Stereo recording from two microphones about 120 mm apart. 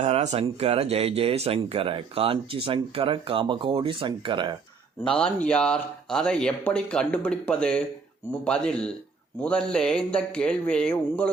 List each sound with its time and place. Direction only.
0.0 s speech: 70° right (ahead or behind); by 4.5 s 40° right (ahead or behind)
5.0 s speech: 10° left (ahead or behind)